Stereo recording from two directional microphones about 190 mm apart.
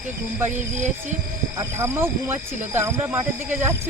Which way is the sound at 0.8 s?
40° right (ahead or behind).